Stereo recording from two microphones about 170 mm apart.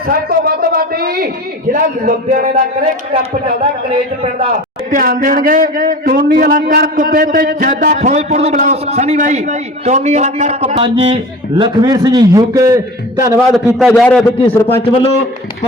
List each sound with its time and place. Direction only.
0.1 s a man's voice: 65° right (ahead or behind)
4.9 s a man's voice: 55° right (ahead or behind); by 13.4 s 20° right (ahead or behind)
13.7 s a man's voice: centre (ahead or behind)